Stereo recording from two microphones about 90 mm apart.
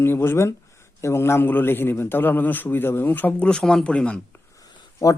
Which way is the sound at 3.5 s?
5° left (ahead or behind).